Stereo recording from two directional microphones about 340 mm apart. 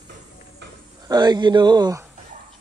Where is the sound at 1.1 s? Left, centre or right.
Centre.